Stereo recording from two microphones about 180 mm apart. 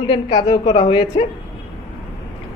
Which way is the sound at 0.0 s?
30° left (ahead or behind).